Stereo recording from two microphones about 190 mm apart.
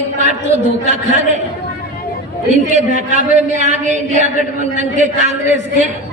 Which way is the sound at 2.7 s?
40° right (ahead or behind).